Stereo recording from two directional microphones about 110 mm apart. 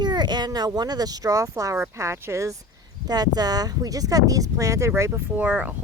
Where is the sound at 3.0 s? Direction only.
35° right (ahead or behind).